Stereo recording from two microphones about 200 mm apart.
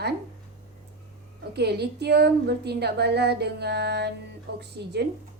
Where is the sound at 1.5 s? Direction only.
55° right (ahead or behind).